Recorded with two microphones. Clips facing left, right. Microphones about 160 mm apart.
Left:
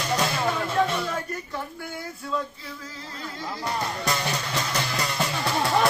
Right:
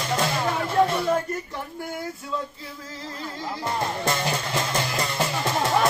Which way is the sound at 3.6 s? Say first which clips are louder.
Right 2 dB; 25° right (ahead or behind).